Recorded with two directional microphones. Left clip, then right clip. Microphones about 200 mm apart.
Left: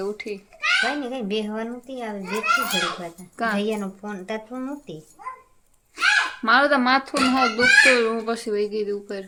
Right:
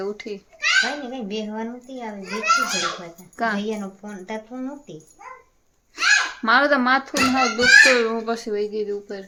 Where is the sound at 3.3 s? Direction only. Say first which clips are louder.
Right 1 dB; centre (ahead or behind).